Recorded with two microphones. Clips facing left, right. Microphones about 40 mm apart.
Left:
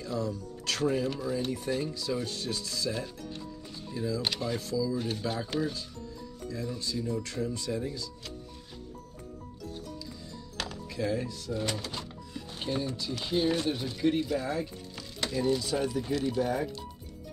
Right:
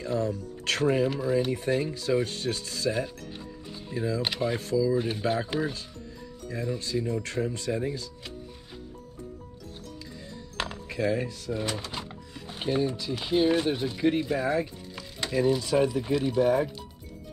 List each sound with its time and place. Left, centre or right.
0.0 s speech: right
1.0 s speech: centre
4.9 s speech: centre; by 8.0 s right
10.6 s music: right
11.9 s speech: right
15.0 s music: centre
15.6 s speech: right
15.9 s speech: centre
16.3 s speech: right